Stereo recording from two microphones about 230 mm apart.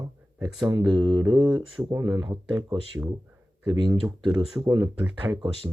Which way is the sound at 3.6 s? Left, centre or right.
Centre.